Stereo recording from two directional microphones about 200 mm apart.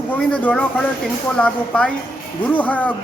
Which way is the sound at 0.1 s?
5° left (ahead or behind).